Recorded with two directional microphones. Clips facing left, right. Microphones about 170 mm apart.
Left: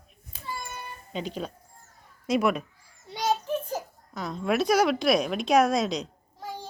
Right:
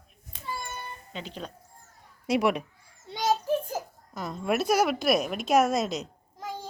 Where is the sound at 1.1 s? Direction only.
15° left (ahead or behind).